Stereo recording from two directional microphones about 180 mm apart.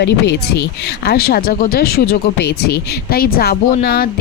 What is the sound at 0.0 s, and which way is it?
A woman's voice, 65° left (ahead or behind).